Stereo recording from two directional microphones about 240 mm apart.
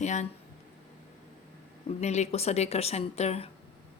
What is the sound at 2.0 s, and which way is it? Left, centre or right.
A woman's voice, left.